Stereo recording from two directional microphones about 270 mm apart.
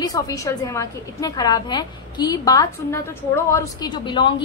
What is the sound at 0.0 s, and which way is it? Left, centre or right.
A woman's voice, centre.